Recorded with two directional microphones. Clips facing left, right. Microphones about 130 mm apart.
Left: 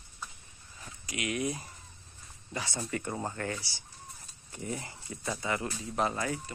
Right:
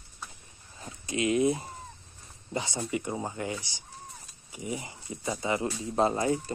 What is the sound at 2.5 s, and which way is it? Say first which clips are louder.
Speech: right 4 dB; 25° right (ahead or behind).